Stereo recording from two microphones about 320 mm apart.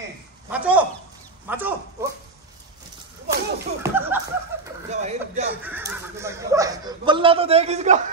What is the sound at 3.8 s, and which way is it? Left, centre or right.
Speech, centre.